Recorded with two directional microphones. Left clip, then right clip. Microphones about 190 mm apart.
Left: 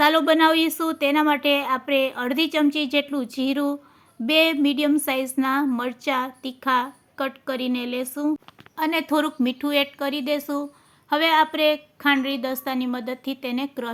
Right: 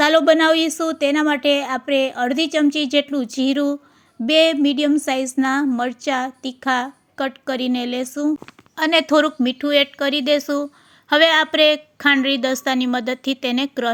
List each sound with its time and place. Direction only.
0.0 s a woman's voice: 20° right (ahead or behind)